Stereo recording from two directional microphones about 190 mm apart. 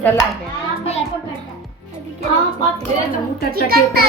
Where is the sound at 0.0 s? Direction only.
15° left (ahead or behind).